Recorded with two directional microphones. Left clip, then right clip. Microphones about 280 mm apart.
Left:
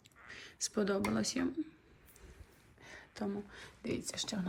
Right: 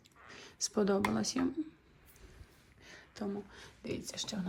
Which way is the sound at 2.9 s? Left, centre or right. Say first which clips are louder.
Even; centre.